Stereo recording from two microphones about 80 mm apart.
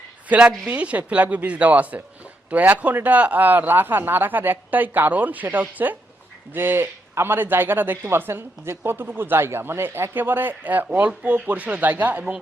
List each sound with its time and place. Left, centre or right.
0.3 s a man's voice: centre